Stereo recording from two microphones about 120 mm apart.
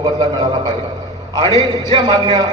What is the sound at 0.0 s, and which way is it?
Speech, 40° right (ahead or behind).